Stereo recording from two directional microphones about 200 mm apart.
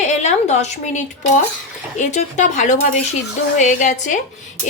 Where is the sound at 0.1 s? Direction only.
35° left (ahead or behind).